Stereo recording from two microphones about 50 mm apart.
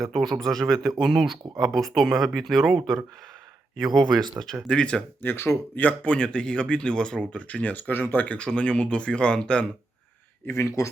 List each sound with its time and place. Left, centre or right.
0.0 s speech: centre
4.7 s speech: left
5.2 s speech: left
5.7 s speech: left; by 7.4 s centre
7.4 s speech: left
8.4 s speech: left
10.5 s a man's voice: left